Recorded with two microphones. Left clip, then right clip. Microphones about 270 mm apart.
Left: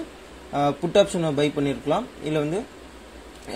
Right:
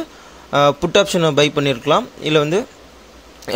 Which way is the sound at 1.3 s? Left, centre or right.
Right.